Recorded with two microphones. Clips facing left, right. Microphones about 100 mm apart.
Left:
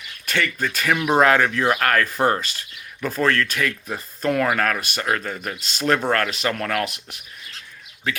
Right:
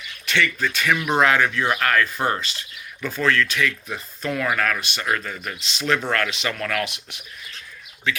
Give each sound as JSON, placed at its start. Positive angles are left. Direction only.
{"t": 0.3, "sound": "speech", "side_deg": 40}